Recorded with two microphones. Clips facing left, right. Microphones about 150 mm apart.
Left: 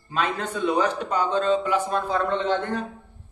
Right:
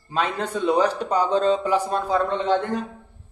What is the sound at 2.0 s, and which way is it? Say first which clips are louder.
Speech: right 2 dB; 10° right (ahead or behind).